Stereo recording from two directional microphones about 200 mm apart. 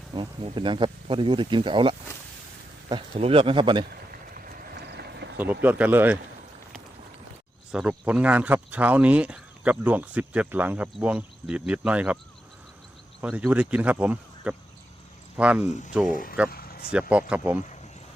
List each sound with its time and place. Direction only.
0.1 s speech: 25° right (ahead or behind)
4.1 s clip-clop: 45° right (ahead or behind)
5.6 s speech: 10° right (ahead or behind)
7.7 s speech: 5° right (ahead or behind)
13.2 s speech: 5° right (ahead or behind)
16.1 s speech: 45° left (ahead or behind)
16.5 s vehicle: 50° left (ahead or behind)
16.9 s speech: 5° right (ahead or behind)